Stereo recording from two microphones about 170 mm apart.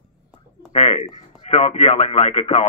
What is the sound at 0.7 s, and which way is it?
Speech, 40° left (ahead or behind).